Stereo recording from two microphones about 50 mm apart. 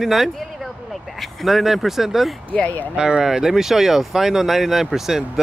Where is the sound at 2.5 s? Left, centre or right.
Left.